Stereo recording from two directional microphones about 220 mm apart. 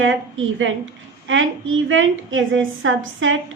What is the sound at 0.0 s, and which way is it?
A woman's voice, 60° right (ahead or behind).